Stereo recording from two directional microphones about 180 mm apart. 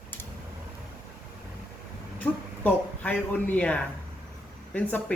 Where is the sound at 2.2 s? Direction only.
10° left (ahead or behind).